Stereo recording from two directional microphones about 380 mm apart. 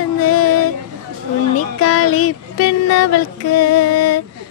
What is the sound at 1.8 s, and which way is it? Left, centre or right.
Child singing, left.